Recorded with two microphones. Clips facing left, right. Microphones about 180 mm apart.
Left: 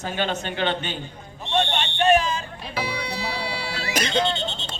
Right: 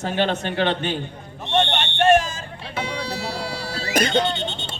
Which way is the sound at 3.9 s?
55° right (ahead or behind).